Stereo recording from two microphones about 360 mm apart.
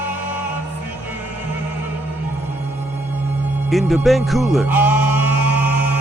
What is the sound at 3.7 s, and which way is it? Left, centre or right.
Music, centre.